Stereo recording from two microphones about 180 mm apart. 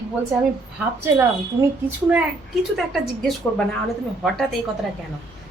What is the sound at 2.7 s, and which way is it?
Speech, centre (ahead or behind).